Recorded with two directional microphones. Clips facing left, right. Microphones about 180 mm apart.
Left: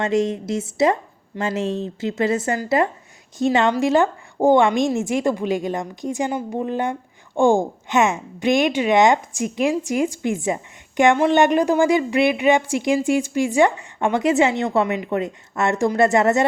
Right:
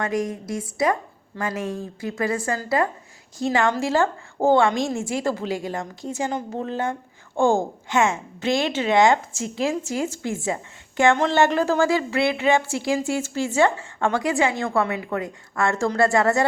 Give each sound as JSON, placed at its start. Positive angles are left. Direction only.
{"t": 0.0, "sound": "a woman's voice", "side_deg": 25}